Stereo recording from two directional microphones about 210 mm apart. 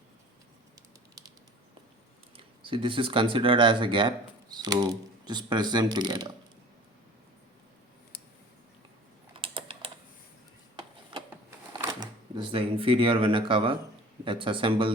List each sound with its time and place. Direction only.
2.3 s speech: 25° right (ahead or behind)
9.3 s typing: 25° right (ahead or behind)
11.8 s speech: 20° right (ahead or behind)